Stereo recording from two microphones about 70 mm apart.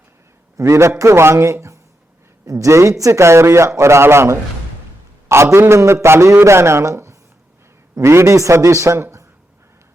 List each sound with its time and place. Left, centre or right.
0.5 s a man's voice: right